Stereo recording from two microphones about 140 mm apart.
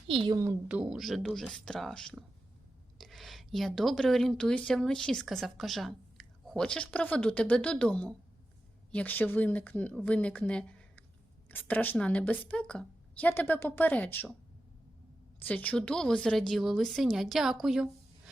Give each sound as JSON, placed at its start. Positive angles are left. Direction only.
{"t": 0.1, "sound": "a woman's voice", "side_deg": -35}
{"t": 0.7, "sound": "a woman's voice", "side_deg": -5}
{"t": 15.4, "sound": "a woman's voice", "side_deg": 10}